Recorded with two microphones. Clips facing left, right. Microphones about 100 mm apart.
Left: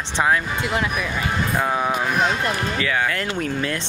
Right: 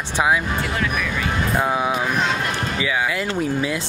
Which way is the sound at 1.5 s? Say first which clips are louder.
Right 1 dB; 10° right (ahead or behind).